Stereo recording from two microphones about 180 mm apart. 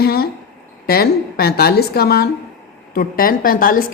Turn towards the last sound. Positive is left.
turn(degrees=50)  # may be behind; listen again after turning